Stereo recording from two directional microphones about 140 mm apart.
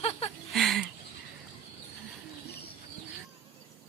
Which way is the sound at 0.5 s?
Centre (ahead or behind).